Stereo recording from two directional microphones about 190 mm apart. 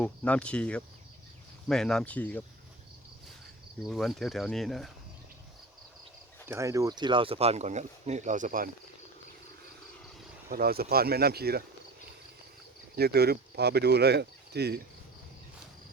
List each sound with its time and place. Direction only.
0.0 s speech: 5° left (ahead or behind)
3.8 s speech: centre (ahead or behind)
6.5 s speech: 15° right (ahead or behind); by 8.7 s 45° right (ahead or behind)
10.5 s speech: 55° right (ahead or behind)
13.0 s speech: 55° right (ahead or behind)